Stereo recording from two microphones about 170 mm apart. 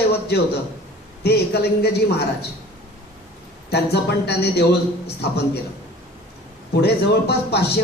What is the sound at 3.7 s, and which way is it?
Speech, 75° left (ahead or behind).